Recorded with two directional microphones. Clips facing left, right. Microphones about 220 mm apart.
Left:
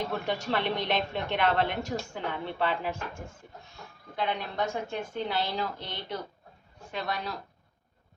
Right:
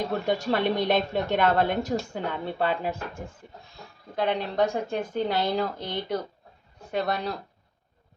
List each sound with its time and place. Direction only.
0.3 s a woman's voice: 45° right (ahead or behind)
4.1 s a woman's voice: 40° right (ahead or behind)